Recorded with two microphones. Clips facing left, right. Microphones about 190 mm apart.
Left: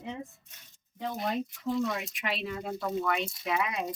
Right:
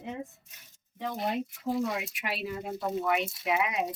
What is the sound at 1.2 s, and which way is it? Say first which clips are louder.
Speech: even; 25° right (ahead or behind).